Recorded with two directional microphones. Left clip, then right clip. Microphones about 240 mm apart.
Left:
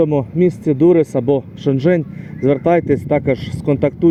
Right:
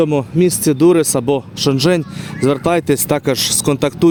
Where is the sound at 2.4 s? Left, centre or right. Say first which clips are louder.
Left 1 dB; right.